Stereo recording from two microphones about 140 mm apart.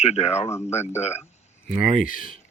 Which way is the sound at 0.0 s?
50° left (ahead or behind).